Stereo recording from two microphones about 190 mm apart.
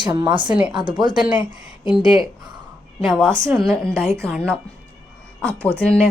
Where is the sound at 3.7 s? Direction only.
15° right (ahead or behind).